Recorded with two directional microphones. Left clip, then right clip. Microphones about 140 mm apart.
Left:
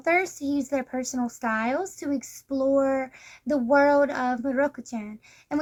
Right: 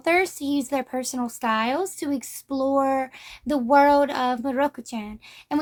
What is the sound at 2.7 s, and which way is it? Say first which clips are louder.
A woman's voice: right 2 dB; 50° right (ahead or behind).